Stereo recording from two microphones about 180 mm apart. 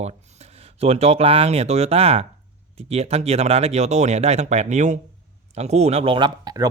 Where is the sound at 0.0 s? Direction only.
35° right (ahead or behind).